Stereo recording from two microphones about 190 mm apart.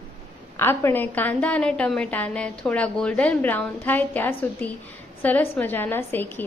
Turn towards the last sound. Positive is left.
turn(degrees=10)  # may be behind; listen again after turning